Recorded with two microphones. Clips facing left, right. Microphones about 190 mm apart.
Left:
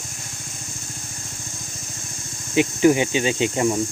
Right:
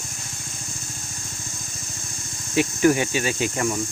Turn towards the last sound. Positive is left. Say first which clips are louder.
# left 4 dB
turn(degrees=20)  # may be behind; listen again after turning